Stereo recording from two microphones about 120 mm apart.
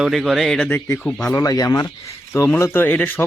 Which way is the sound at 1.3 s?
30° left (ahead or behind).